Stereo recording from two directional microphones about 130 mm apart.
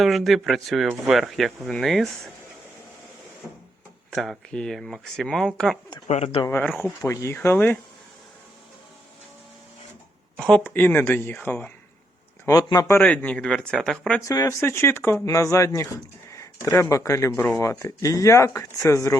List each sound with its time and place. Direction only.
0.0 s speech: centre (ahead or behind)
3.4 s printer: 5° right (ahead or behind)
4.1 s speech: centre (ahead or behind)
6.1 s speech: 55° left (ahead or behind)
6.7 s speech: centre (ahead or behind)
7.0 s speech: 20° left (ahead or behind)
10.3 s speech: 5° left (ahead or behind)
12.5 s speech: 30° left (ahead or behind)
13.0 s speech: 10° left (ahead or behind)
14.3 s speech: 25° left (ahead or behind)